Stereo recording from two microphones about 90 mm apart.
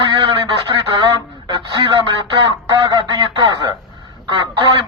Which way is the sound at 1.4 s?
50° right (ahead or behind).